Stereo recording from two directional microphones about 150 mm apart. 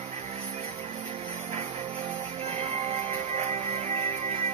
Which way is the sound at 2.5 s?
40° right (ahead or behind).